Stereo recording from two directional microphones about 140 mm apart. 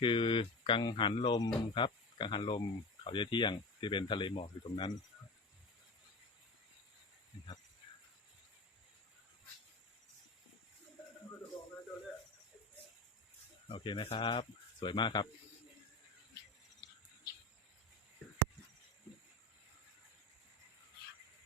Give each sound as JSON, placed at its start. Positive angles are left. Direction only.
{"t": 0.0, "sound": "speech", "side_deg": 35}
{"t": 13.7, "sound": "speech", "side_deg": 35}